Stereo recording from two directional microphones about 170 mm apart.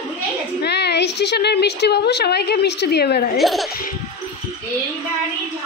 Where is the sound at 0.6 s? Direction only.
80° left.